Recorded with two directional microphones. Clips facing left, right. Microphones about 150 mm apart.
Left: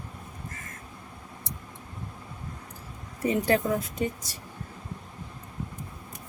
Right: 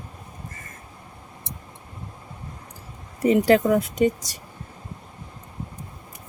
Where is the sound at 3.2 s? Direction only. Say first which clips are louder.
Right 7 dB; 90° right.